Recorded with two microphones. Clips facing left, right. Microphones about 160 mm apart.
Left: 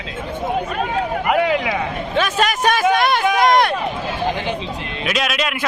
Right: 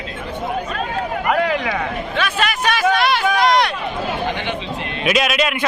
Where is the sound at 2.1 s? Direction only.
40° left (ahead or behind).